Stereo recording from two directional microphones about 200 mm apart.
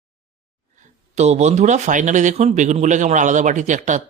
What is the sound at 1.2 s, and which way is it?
Speech, 35° right (ahead or behind).